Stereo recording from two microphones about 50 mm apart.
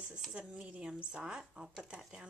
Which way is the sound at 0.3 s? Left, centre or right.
Right.